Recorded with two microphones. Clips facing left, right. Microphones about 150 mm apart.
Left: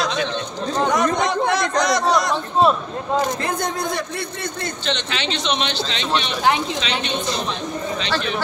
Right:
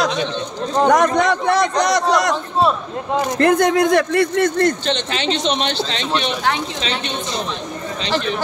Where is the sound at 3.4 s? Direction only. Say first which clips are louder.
Right 10 dB; 65° right (ahead or behind); by 4.7 s 90° right.